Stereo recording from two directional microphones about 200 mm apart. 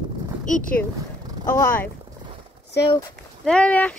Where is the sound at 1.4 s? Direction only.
15° left (ahead or behind).